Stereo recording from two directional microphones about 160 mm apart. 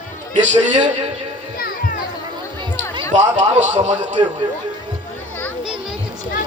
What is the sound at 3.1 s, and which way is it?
A man's voice, 45° right (ahead or behind).